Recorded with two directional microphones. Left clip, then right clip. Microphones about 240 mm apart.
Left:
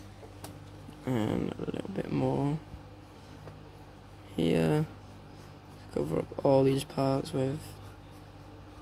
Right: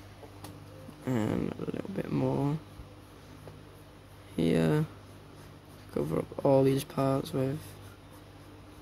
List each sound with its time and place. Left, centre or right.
1.0 s speech: centre
4.4 s a sound: centre
5.9 s speech: centre